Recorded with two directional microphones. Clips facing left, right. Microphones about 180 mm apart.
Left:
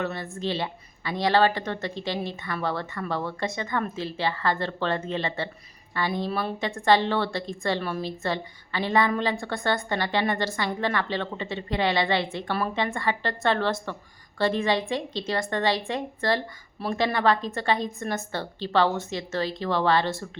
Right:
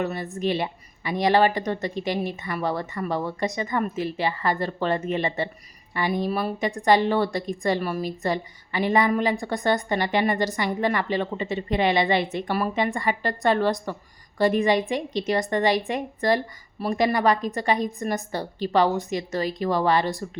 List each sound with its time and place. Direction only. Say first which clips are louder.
0.0 s a woman's voice: right 3 dB; 15° right (ahead or behind)